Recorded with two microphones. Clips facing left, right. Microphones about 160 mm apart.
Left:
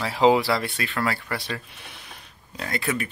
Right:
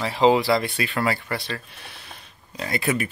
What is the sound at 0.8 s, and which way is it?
Speech, 10° right (ahead or behind).